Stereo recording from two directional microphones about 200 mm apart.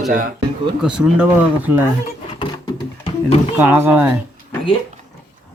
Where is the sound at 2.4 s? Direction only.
20° left (ahead or behind).